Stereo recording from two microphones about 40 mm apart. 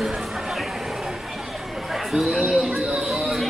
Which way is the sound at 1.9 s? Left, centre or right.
Centre.